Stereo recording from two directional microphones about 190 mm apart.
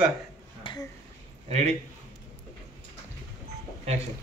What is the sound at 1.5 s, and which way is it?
Speech, 35° right (ahead or behind).